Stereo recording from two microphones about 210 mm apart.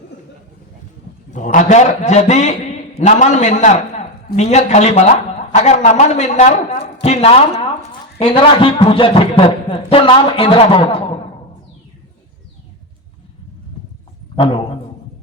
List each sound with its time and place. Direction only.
1.3 s a man's voice: 35° left (ahead or behind)
14.3 s a man's voice: 25° left (ahead or behind)